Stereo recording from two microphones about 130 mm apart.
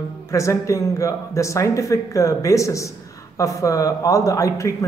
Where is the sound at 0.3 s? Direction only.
25° left (ahead or behind).